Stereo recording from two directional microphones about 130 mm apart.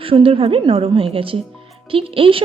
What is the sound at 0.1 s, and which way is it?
A woman's voice, 45° right (ahead or behind).